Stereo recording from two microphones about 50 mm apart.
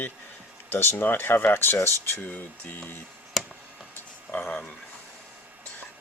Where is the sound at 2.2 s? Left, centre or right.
Left.